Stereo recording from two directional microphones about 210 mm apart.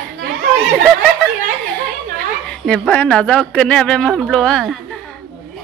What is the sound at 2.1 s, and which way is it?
A woman's voice, 5° left (ahead or behind).